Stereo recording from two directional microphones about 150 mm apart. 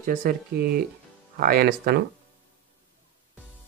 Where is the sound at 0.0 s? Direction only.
70° right (ahead or behind).